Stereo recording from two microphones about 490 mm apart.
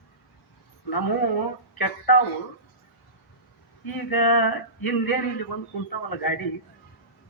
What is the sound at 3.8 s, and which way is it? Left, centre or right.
Speech, left.